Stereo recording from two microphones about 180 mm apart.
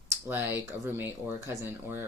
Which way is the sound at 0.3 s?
10° right (ahead or behind).